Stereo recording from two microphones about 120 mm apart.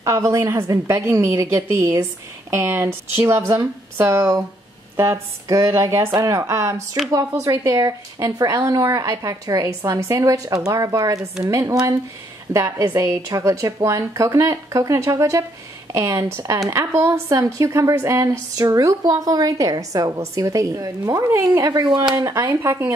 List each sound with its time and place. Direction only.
0.0 s speech: 25° right (ahead or behind)